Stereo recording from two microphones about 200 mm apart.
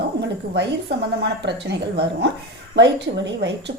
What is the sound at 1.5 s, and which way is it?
A woman's voice, 60° right (ahead or behind).